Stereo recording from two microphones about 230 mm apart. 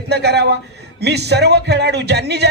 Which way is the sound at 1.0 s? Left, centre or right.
Right.